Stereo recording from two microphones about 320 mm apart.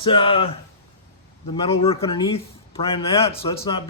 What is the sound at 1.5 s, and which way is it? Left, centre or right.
Speech, centre.